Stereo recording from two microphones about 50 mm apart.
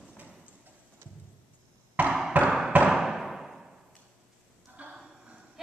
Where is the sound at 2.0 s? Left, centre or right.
Right.